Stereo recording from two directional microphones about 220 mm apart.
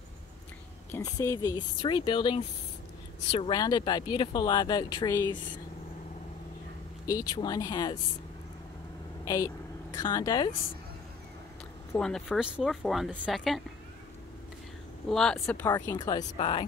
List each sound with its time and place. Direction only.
0.9 s speech: 15° left (ahead or behind)
7.1 s speech: 15° left (ahead or behind)
9.2 s speech: 15° left (ahead or behind)
11.9 s speech: centre (ahead or behind)
15.0 s speech: centre (ahead or behind)
15.7 s speech: 15° left (ahead or behind)